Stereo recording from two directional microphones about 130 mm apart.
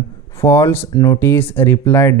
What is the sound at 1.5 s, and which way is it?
Speech, 15° left (ahead or behind).